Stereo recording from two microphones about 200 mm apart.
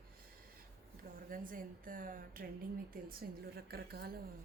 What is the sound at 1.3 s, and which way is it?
Speech, 45° right (ahead or behind).